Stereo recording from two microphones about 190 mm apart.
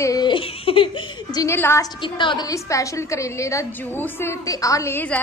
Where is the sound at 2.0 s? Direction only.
25° left (ahead or behind).